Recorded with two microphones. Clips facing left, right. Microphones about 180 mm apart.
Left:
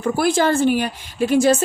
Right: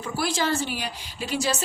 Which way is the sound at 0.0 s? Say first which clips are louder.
Left 9 dB; 55° left (ahead or behind).